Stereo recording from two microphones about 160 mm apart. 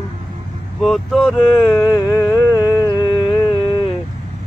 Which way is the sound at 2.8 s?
25° left (ahead or behind).